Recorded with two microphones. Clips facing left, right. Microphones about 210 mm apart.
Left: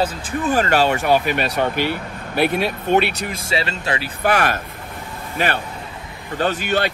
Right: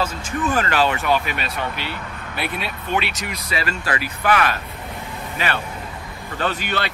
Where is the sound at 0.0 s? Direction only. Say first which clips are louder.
Left 2 dB; 35° left (ahead or behind); by 3.4 s 55° left (ahead or behind).